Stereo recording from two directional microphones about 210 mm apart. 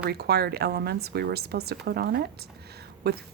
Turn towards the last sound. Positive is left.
turn(degrees=-50)  # may be behind; listen again after turning